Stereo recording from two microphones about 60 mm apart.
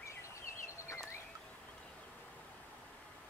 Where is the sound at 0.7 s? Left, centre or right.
Left.